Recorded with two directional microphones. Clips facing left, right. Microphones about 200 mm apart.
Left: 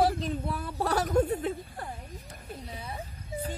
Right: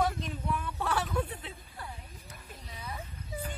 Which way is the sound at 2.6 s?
30° left (ahead or behind).